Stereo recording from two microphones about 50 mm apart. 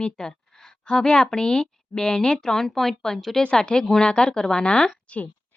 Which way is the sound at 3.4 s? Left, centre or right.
Left.